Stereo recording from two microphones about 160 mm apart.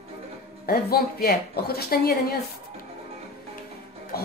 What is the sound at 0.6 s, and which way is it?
A man's voice, 70° left (ahead or behind).